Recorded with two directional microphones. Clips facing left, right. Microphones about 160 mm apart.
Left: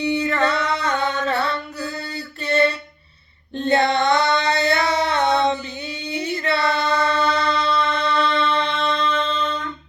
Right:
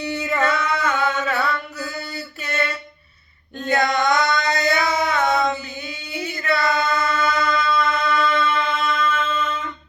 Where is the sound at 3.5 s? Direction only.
30° left (ahead or behind).